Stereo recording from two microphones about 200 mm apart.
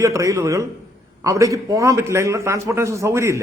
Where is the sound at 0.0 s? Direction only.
15° right (ahead or behind).